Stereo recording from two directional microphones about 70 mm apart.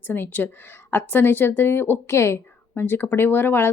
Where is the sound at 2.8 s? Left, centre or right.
Left.